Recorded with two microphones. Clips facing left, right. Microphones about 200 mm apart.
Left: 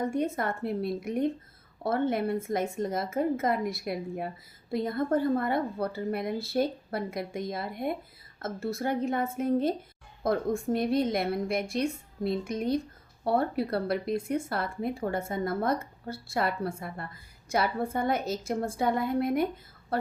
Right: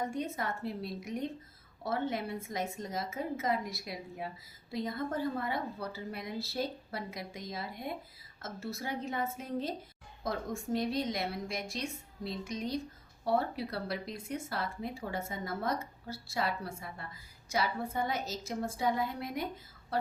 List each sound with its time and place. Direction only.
0.0 s a woman's voice: 55° left (ahead or behind)